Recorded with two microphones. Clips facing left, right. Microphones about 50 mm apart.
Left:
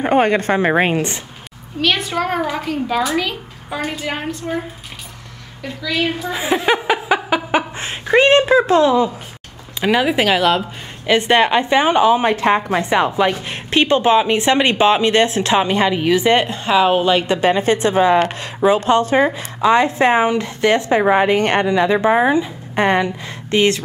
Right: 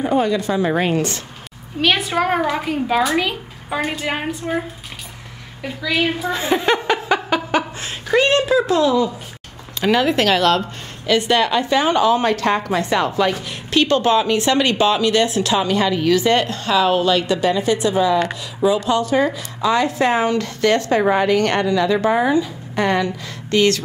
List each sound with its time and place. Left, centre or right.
0.0 s a woman's voice: left
1.8 s a woman's voice: centre
6.3 s chuckle: centre
7.8 s a sound: left
9.8 s speech: centre
11.1 s speech: left